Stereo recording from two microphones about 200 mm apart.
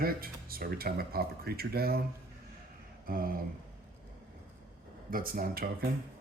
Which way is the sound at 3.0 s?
45° right (ahead or behind).